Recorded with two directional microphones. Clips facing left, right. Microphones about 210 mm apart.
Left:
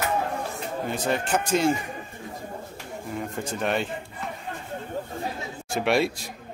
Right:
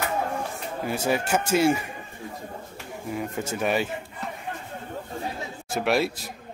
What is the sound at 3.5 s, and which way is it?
Speech, 5° right (ahead or behind).